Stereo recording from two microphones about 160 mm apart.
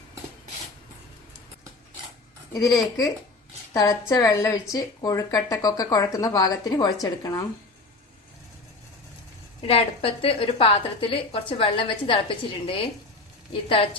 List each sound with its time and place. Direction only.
3.8 s speech: 20° left (ahead or behind)
9.6 s a woman's voice: 35° left (ahead or behind)